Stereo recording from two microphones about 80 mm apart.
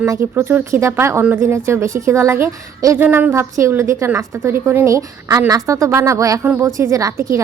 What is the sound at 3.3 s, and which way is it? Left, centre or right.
A woman's voice, right.